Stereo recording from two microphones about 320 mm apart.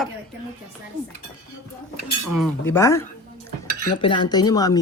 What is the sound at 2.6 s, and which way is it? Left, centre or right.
Speech, centre.